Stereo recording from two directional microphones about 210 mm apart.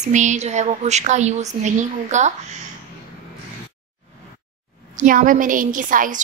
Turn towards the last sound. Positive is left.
turn(degrees=-40)  # may be behind; listen again after turning